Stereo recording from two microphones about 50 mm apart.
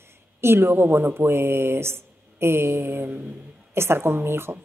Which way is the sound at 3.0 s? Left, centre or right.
Right.